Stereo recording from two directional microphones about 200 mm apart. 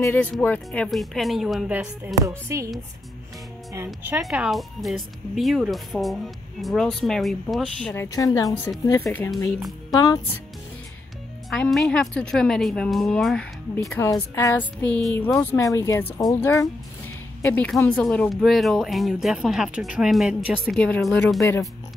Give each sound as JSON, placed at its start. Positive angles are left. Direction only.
{"t": 0.0, "sound": "speech", "side_deg": 10}
{"t": 2.2, "sound": "speech", "side_deg": -15}
{"t": 3.7, "sound": "speech", "side_deg": -10}
{"t": 7.9, "sound": "a woman's voice", "side_deg": 15}
{"t": 9.6, "sound": "speech", "side_deg": 0}
{"t": 9.9, "sound": "a woman's voice", "side_deg": 15}
{"t": 11.5, "sound": "a woman's voice", "side_deg": 0}
{"t": 21.4, "sound": "a woman's voice", "side_deg": 15}